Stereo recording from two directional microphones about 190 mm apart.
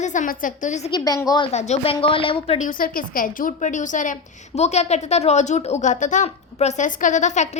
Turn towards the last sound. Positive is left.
turn(degrees=40)  # may be behind; listen again after turning